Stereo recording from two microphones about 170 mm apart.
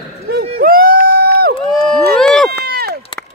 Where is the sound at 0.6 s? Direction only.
60° right (ahead or behind).